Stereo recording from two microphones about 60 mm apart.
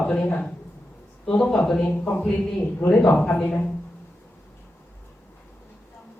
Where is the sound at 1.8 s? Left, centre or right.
Left.